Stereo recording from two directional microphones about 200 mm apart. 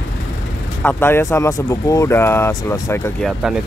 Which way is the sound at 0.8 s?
10° left (ahead or behind).